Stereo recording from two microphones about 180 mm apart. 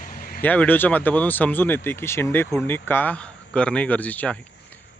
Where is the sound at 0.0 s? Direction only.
50° left (ahead or behind).